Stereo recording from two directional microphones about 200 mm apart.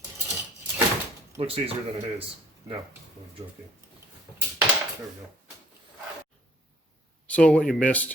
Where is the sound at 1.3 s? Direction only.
30° right (ahead or behind).